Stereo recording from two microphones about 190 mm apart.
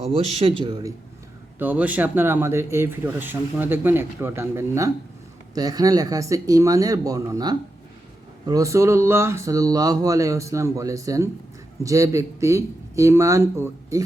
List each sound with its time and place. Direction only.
0.0 s speech: 30° right (ahead or behind)
1.5 s speech: 10° right (ahead or behind)